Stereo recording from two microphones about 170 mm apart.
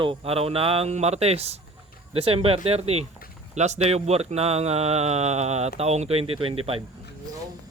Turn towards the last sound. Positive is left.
turn(degrees=-35)  # may be behind; listen again after turning